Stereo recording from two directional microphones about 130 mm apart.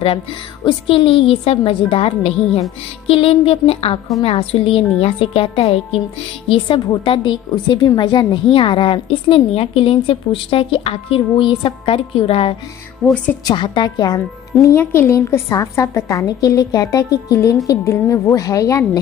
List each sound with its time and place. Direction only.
0.7 s a woman's voice: 45° left (ahead or behind)
13.1 s a woman's voice: 10° left (ahead or behind)
13.5 s speech: 35° left (ahead or behind)